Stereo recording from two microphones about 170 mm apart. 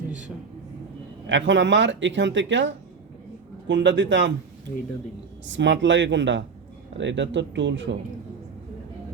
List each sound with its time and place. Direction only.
1.3 s speech: 90° right
5.5 s speech: 90° right